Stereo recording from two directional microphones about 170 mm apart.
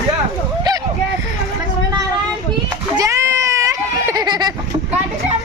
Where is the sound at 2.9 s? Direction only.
20° right (ahead or behind).